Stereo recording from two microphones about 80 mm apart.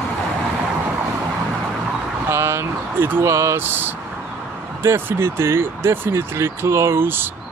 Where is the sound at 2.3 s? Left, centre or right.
Right.